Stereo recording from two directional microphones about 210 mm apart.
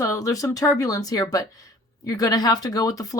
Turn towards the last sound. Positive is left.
turn(degrees=15)  # may be behind; listen again after turning